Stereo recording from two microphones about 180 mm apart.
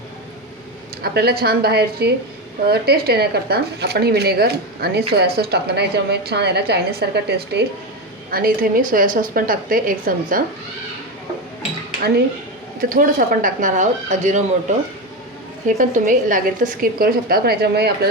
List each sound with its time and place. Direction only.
1.0 s a woman's voice: 60° right (ahead or behind)
8.3 s a woman's voice: 55° right (ahead or behind)
12.9 s a woman's voice: 50° right (ahead or behind)
15.6 s a woman's voice: 45° right (ahead or behind); by 18.1 s 65° right (ahead or behind)